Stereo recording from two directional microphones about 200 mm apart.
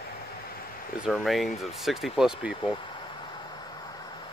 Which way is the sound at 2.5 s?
25° left (ahead or behind).